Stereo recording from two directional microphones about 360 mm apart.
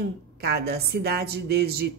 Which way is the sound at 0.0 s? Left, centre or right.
Right.